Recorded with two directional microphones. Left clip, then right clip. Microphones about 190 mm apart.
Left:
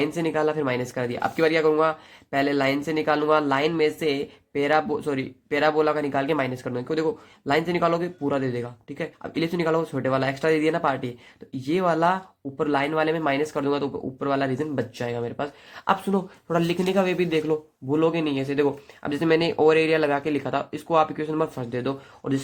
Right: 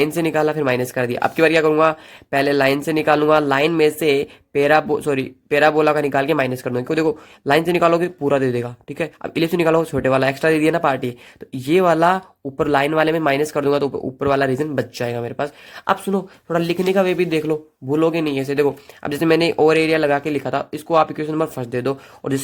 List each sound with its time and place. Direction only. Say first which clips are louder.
0.0 s speech: right 6 dB; 35° right (ahead or behind)